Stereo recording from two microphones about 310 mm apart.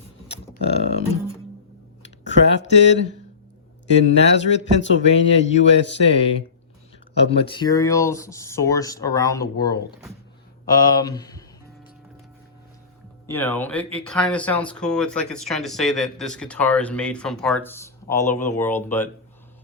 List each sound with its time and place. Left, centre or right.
0.6 s a sound: left
2.2 s speech: left
4.4 s speech: left
7.3 s speech: centre
13.2 s speech: centre